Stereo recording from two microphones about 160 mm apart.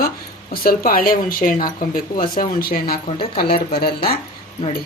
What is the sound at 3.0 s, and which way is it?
Speech, 35° left (ahead or behind).